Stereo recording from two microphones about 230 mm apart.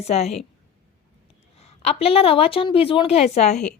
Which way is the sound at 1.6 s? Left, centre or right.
Left.